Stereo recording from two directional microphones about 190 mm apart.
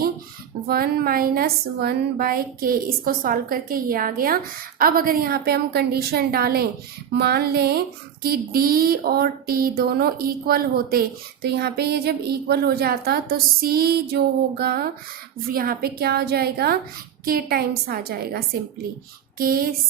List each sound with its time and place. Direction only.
0.7 s a woman's voice: 50° right (ahead or behind)